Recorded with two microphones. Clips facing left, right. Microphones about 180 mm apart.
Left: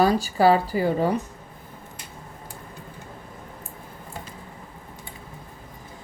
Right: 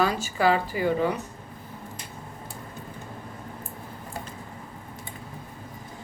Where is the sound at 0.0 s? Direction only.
35° left (ahead or behind).